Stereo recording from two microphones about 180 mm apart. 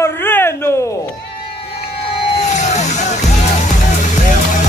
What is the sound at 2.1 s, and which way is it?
Vehicle, 35° left (ahead or behind).